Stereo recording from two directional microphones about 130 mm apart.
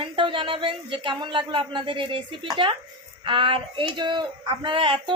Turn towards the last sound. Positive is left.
turn(degrees=-40)  # may be behind; listen again after turning